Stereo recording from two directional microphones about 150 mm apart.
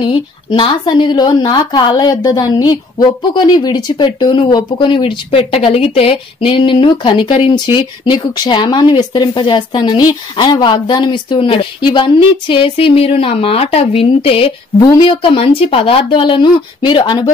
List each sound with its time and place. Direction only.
0.0 s a woman's voice: 35° left (ahead or behind)